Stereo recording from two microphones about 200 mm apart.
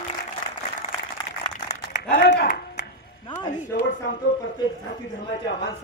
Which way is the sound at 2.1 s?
55° left (ahead or behind).